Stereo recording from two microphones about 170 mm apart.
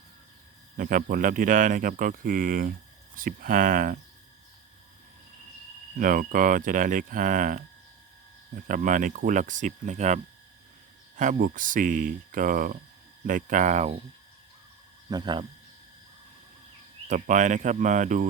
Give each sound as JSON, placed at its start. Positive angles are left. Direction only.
{"t": 0.8, "sound": "speech", "side_deg": -55}
{"t": 6.0, "sound": "speech", "side_deg": -55}
{"t": 8.6, "sound": "speech", "side_deg": -50}
{"t": 11.2, "sound": "speech", "side_deg": -50}
{"t": 15.1, "sound": "speech", "side_deg": -25}
{"t": 17.1, "sound": "speech", "side_deg": -45}